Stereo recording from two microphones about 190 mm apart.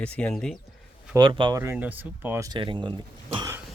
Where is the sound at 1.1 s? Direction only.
25° right (ahead or behind).